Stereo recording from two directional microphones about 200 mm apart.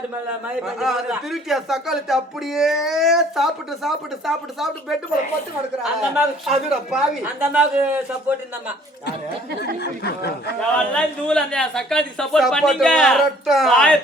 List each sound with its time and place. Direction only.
0.4 s a man's voice: centre (ahead or behind)
9.8 s speech: 55° left (ahead or behind)
10.9 s a man's voice: 5° left (ahead or behind)